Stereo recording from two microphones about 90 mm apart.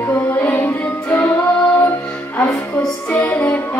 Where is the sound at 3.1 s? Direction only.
15° left (ahead or behind).